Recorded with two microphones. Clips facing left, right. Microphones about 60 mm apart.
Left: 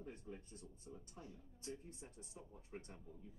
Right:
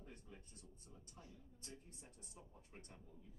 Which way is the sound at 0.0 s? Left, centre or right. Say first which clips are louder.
Left 7 dB; left.